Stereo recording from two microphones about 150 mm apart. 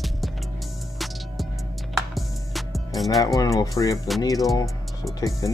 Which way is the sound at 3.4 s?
25° left (ahead or behind).